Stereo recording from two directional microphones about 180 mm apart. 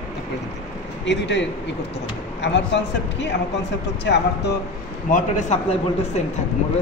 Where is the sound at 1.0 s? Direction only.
75° left (ahead or behind).